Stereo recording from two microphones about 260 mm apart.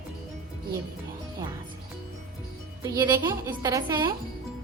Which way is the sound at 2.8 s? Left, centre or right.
Centre.